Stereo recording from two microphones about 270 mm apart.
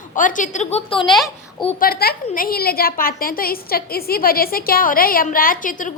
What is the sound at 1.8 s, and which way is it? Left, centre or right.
A woman's voice, left.